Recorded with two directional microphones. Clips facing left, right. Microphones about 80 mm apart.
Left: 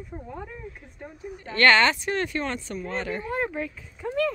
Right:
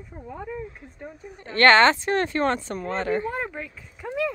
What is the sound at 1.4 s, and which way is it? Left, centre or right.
Speech, right.